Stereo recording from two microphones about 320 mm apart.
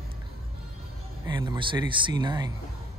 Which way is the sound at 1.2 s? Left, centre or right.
Centre.